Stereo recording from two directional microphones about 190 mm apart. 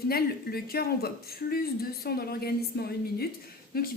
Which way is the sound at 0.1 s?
55° left (ahead or behind).